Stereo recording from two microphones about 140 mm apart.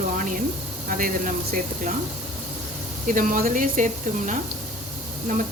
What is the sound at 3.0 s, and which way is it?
Speech, 75° right (ahead or behind).